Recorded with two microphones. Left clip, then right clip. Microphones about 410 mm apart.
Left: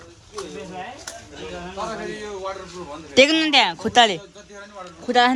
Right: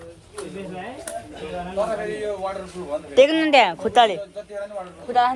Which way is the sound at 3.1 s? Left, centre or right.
Centre.